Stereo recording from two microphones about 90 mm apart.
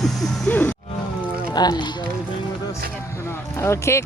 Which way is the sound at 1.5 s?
50° left (ahead or behind).